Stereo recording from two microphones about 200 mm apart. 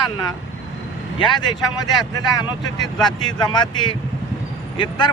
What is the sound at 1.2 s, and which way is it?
Speech, 20° left (ahead or behind).